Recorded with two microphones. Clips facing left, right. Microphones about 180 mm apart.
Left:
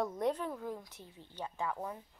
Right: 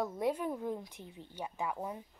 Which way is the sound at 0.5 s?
20° right (ahead or behind).